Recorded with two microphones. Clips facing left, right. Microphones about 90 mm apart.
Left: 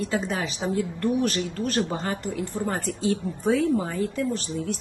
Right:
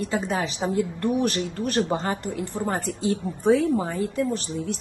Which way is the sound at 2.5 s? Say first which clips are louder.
Right 3 dB; 25° right (ahead or behind).